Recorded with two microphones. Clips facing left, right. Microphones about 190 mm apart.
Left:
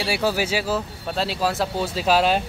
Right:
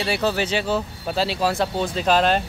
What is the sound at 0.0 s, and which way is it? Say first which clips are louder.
Speech: even; 5° left (ahead or behind).